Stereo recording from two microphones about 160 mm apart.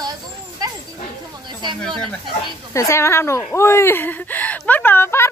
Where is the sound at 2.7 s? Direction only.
15° left (ahead or behind).